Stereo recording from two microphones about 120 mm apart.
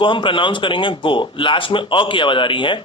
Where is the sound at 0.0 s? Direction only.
45° left (ahead or behind).